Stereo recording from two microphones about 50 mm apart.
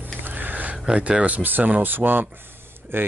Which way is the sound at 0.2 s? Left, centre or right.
Right.